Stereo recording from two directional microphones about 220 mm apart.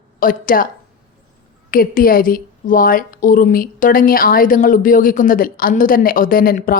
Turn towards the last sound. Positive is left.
turn(degrees=40)  # may be behind; listen again after turning